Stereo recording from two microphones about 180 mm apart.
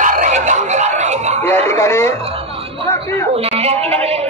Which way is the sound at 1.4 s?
15° left (ahead or behind).